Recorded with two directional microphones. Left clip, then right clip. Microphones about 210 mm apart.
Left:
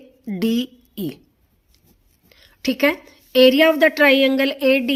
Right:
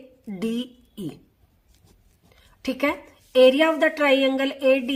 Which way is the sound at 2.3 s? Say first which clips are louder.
Left 6 dB; 35° left (ahead or behind).